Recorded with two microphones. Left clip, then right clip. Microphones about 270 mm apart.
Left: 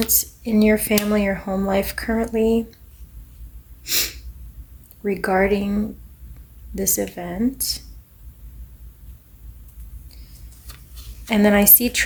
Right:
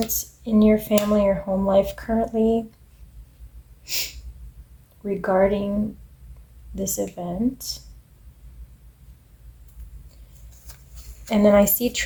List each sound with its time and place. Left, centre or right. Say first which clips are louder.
0.1 s speech: left 2 dB; left
3.8 s speech: left 6 dB; left
6.7 s speech: left 3 dB; left
11.3 s speech: right 1 dB; left